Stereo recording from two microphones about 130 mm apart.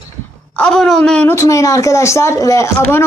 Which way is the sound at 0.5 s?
5° left (ahead or behind).